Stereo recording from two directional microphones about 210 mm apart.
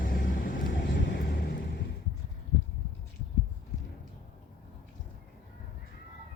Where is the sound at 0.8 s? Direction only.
55° left (ahead or behind).